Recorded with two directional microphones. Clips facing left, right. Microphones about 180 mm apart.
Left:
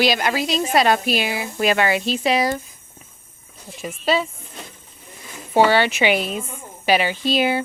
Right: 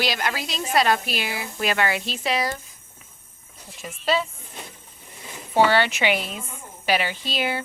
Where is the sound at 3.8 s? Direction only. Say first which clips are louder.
Left 3 dB; 15° left (ahead or behind).